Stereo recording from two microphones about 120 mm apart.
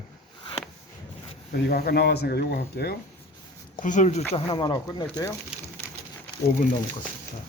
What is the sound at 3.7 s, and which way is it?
Speech, 90° left.